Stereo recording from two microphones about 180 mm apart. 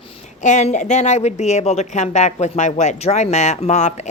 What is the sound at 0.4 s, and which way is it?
A woman's voice, 40° left (ahead or behind).